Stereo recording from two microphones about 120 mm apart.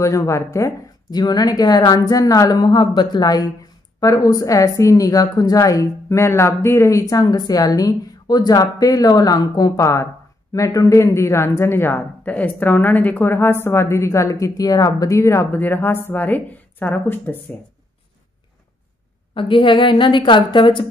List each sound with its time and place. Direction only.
0.0 s a woman's voice: 25° left (ahead or behind)
1.1 s a woman's voice: 35° left (ahead or behind); by 17.4 s 15° left (ahead or behind)
19.3 s a woman's voice: 45° left (ahead or behind)